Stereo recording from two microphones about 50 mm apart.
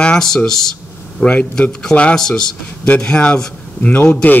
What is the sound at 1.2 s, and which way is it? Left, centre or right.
Speech, left.